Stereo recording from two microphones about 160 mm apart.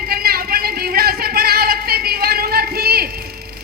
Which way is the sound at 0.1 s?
70° right (ahead or behind).